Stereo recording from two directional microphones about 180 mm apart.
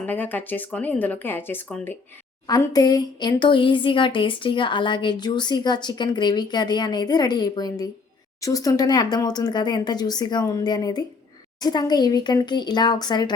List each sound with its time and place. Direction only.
0.0 s speech: 10° left (ahead or behind)